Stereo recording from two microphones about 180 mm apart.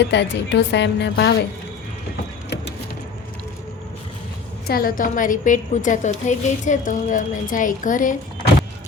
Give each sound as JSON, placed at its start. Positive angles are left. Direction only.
{"t": 0.1, "sound": "a woman's voice", "side_deg": 70}
{"t": 4.6, "sound": "a woman's voice", "side_deg": 55}